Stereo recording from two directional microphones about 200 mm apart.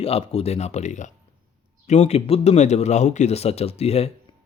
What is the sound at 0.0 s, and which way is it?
A man's voice, 30° left (ahead or behind).